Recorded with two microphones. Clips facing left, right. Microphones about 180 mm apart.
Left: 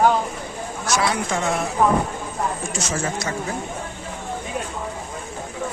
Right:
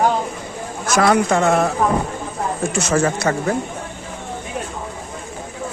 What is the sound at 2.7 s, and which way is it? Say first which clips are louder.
Speech: right 7 dB; 60° right (ahead or behind).